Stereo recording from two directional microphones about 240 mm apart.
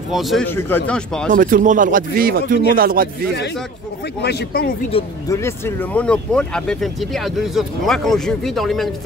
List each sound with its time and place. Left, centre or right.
0.1 s speech: centre
1.3 s speech: right
4.2 s speech: left
4.9 s speech: centre